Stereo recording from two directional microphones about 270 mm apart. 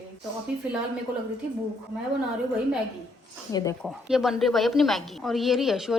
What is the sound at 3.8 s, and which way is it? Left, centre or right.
A woman's voice, centre.